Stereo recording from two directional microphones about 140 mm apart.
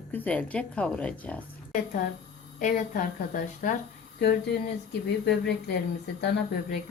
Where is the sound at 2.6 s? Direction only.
65° left (ahead or behind).